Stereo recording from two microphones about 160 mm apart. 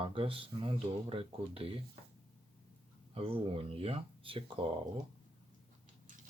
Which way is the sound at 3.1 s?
35° right (ahead or behind).